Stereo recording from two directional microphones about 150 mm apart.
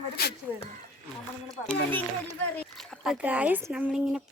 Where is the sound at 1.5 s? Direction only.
10° left (ahead or behind).